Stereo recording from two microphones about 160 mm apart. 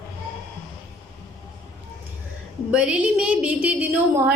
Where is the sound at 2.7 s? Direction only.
5° right (ahead or behind).